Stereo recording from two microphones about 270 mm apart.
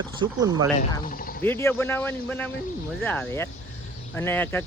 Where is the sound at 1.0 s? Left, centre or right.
Left.